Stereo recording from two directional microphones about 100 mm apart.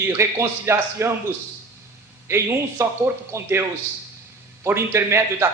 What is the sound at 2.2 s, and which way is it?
A man's voice, 25° right (ahead or behind).